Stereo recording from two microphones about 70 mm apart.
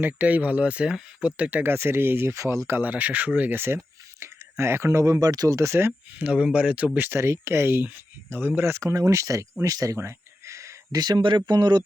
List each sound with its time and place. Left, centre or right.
0.0 s speech: right
1.7 s speech: right
2.4 s speech: right
2.6 s speech: right
4.2 s speech: right
5.5 s speech: right
6.1 s speech: centre
7.2 s speech: right
8.6 s speech: right
10.0 s a sound: right
10.9 s speech: right